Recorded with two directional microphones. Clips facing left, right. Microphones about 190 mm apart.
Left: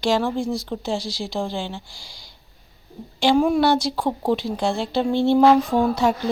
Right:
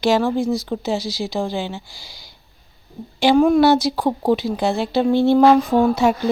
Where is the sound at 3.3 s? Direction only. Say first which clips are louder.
Right 5 dB; 5° left (ahead or behind).